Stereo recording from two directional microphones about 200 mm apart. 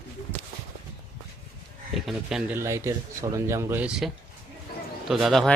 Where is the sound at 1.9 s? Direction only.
Centre (ahead or behind).